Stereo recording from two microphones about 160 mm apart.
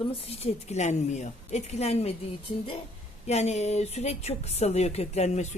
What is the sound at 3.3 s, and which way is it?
Speech, 45° left (ahead or behind).